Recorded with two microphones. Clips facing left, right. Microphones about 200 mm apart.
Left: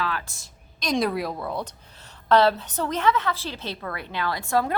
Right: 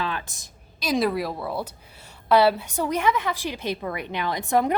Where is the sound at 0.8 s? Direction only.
5° right (ahead or behind).